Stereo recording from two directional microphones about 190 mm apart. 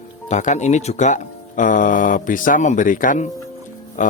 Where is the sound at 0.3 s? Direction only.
40° left (ahead or behind).